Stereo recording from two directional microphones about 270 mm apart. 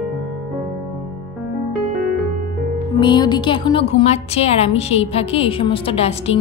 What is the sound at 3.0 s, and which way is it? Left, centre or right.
A woman's voice, centre.